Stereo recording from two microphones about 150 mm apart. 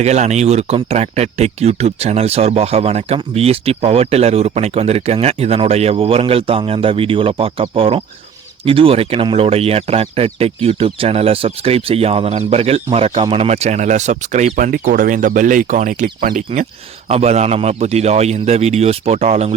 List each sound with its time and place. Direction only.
0.0 s speech: 50° right (ahead or behind)
17.1 s speech: 45° right (ahead or behind)